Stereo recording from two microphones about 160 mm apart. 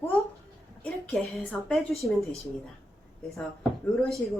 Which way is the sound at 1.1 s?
5° left (ahead or behind).